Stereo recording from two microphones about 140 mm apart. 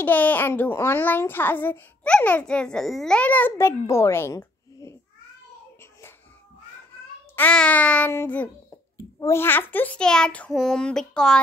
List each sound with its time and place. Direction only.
0.0 s a child's voice: 10° left (ahead or behind)
5.8 s music: 20° left (ahead or behind)
7.3 s a child's voice: 10° left (ahead or behind)